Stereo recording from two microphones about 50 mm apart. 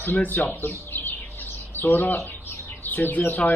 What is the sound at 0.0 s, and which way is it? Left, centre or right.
Speech, left.